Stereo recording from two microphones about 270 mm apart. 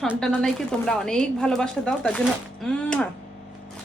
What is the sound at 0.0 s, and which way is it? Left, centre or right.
A woman's voice, centre.